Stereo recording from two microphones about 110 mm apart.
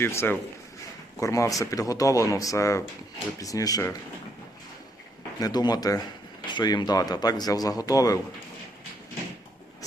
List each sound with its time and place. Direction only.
0.0 s a man's voice: 20° left (ahead or behind)
5.4 s a man's voice: 40° left (ahead or behind)